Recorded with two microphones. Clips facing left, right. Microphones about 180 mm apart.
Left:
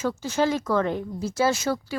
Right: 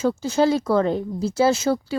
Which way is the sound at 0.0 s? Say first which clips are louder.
Right 5 dB; 30° right (ahead or behind).